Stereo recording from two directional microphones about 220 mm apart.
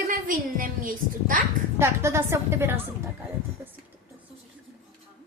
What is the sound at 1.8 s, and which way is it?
A woman's voice, 10° right (ahead or behind).